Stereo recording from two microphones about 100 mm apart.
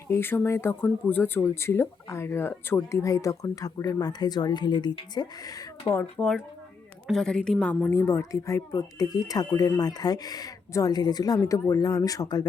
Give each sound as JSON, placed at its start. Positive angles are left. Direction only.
{"t": 0.1, "sound": "speech", "side_deg": 20}
{"t": 5.8, "sound": "speech", "side_deg": 25}
{"t": 7.1, "sound": "a woman's voice", "side_deg": 5}
{"t": 7.9, "sound": "speech", "side_deg": 25}